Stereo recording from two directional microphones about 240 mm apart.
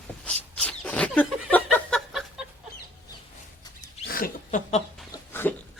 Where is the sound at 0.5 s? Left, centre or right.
Centre.